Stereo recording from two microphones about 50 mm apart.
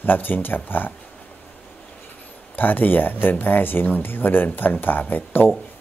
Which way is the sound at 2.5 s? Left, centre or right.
Left.